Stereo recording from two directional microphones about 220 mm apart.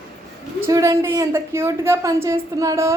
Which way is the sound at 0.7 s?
15° right (ahead or behind).